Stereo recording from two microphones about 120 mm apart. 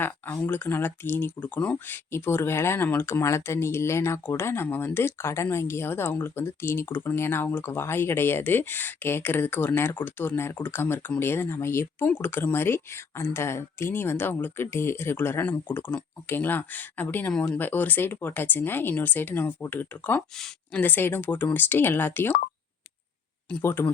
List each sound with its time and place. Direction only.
0.4 s speech: 15° left (ahead or behind)
23.6 s speech: 20° left (ahead or behind)